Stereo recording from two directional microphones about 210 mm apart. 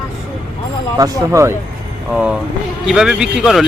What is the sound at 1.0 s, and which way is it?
Speech, 15° right (ahead or behind).